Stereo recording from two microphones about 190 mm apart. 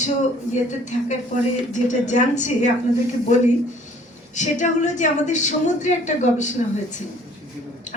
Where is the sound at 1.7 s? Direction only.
40° left (ahead or behind).